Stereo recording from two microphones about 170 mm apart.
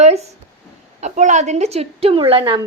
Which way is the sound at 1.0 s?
45° right (ahead or behind).